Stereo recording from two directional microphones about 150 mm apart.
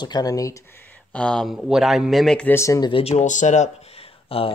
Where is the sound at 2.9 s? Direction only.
45° left (ahead or behind).